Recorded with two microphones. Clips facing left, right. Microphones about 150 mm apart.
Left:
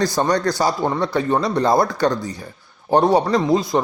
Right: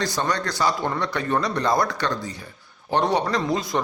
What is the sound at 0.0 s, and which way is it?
Speech, 40° left (ahead or behind).